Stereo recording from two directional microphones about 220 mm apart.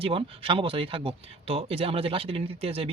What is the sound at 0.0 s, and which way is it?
Speech, 25° right (ahead or behind).